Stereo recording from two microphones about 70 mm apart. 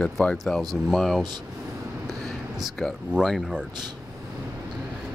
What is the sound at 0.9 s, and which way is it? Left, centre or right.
Speech, centre.